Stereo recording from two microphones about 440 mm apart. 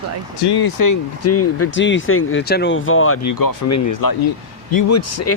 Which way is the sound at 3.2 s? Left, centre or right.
Left.